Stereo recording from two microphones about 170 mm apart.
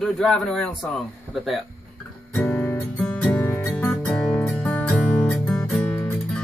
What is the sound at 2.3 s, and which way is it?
Music, 10° left (ahead or behind).